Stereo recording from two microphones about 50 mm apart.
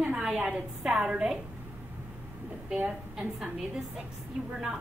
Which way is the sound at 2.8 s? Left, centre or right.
Centre.